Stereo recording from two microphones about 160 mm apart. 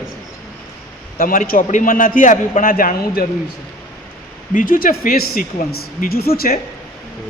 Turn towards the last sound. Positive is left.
turn(degrees=60)  # may be behind; listen again after turning